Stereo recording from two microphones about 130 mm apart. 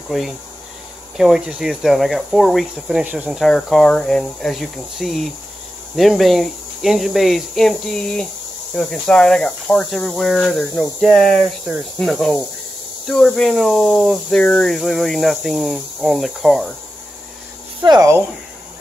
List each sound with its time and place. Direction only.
0.1 s speech: centre (ahead or behind)
3.0 s speech: 10° right (ahead or behind)
17.8 s speech: 25° right (ahead or behind)